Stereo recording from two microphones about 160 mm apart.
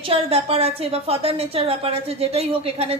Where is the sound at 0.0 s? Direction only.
40° right (ahead or behind).